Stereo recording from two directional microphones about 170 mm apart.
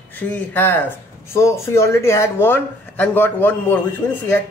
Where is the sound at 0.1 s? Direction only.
10° left (ahead or behind).